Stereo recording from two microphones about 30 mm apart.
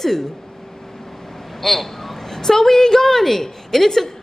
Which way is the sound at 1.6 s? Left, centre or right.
Centre.